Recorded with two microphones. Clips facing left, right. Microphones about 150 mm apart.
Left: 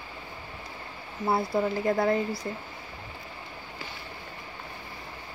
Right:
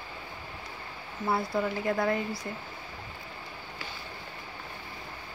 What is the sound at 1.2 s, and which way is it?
Speech, 30° left (ahead or behind).